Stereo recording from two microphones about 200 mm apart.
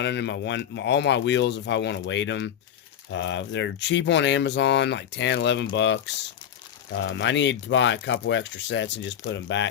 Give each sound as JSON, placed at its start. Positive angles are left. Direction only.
{"t": 0.0, "sound": "speech", "side_deg": 60}